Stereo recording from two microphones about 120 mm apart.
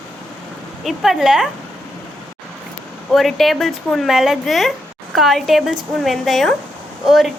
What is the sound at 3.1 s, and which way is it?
Speech, centre (ahead or behind).